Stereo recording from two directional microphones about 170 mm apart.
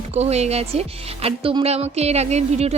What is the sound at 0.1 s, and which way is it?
Speech, 40° right (ahead or behind).